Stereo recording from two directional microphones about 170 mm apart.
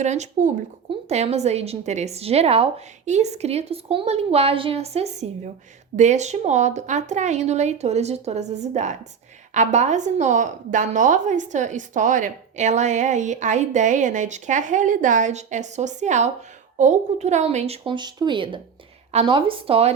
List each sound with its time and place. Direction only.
0.0 s a woman's voice: 45° right (ahead or behind)